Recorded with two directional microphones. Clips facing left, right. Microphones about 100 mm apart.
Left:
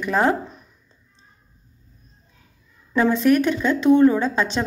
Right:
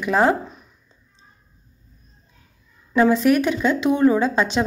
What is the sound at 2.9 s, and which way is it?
A woman's voice, 10° right (ahead or behind).